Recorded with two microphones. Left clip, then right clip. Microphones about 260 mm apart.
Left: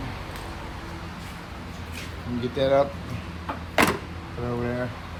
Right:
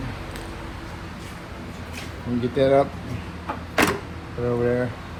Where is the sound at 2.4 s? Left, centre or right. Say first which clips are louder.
Right 3 dB; centre.